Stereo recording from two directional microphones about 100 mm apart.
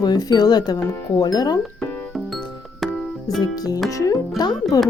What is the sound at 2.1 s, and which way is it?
Music, centre (ahead or behind).